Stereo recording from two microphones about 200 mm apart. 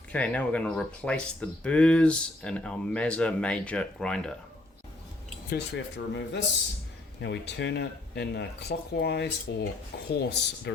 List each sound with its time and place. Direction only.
0.1 s speech: 5° left (ahead or behind)
5.5 s speech: 60° left (ahead or behind)